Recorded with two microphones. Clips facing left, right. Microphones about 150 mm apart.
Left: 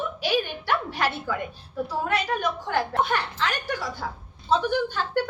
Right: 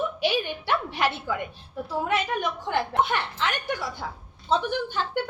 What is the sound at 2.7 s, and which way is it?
A woman's voice, 20° right (ahead or behind).